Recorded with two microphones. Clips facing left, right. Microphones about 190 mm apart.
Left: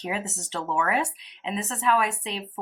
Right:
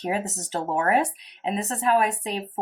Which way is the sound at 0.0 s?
40° right (ahead or behind).